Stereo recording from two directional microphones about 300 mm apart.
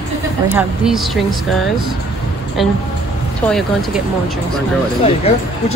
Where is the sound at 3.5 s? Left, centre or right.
Centre.